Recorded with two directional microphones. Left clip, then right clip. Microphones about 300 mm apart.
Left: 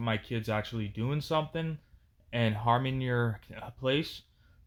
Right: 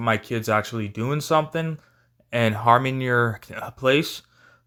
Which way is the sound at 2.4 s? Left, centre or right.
Right.